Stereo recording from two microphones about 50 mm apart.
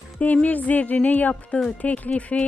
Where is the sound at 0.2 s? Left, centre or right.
Left.